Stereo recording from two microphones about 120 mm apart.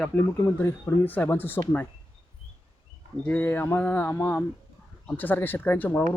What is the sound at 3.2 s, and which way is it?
Speech, 15° left (ahead or behind).